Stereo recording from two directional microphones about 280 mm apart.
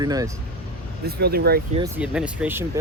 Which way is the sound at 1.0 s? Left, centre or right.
Right.